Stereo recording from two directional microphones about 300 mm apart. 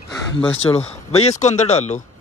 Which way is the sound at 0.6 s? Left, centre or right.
Left.